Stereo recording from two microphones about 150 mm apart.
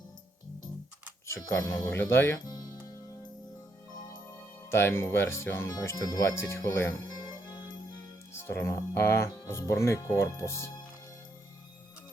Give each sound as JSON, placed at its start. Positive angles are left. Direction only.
{"t": 1.6, "sound": "speech", "side_deg": 20}
{"t": 4.7, "sound": "speech", "side_deg": 15}
{"t": 7.3, "sound": "music", "side_deg": 30}
{"t": 8.4, "sound": "speech", "side_deg": 15}